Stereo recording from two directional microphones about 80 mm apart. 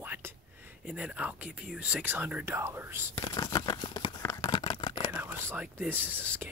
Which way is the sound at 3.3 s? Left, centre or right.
Left.